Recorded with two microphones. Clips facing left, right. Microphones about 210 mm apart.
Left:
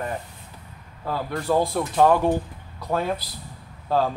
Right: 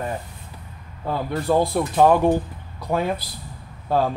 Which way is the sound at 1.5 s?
10° right (ahead or behind).